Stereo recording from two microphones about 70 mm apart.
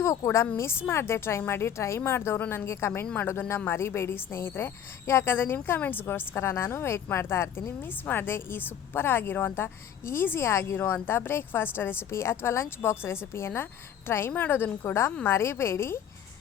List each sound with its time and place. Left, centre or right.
0.0 s a woman's voice: left